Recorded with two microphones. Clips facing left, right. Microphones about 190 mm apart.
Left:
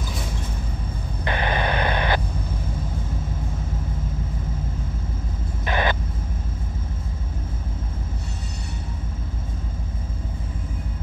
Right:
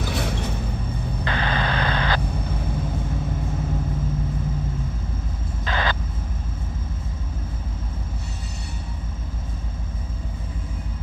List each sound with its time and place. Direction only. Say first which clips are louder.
0.0 s a sound: right 5 dB; 75° right (ahead or behind)
1.2 s vehicle: left 2 dB; 20° left (ahead or behind)
5.7 s vehicle: left 3 dB; 20° left (ahead or behind)